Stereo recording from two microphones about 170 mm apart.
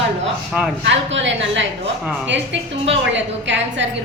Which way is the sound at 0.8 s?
90° right.